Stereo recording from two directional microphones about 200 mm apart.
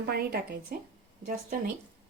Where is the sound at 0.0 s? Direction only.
50° right (ahead or behind).